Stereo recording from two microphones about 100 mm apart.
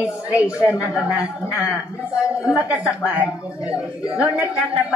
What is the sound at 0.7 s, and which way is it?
Speech, 30° left (ahead or behind).